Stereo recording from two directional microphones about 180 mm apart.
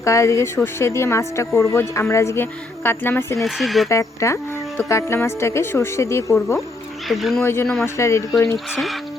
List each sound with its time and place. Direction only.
0.0 s speech: 15° left (ahead or behind)
3.4 s speech: centre (ahead or behind)
3.8 s speech: 15° left (ahead or behind)
7.1 s speech: centre (ahead or behind)
7.4 s speech: 15° left (ahead or behind)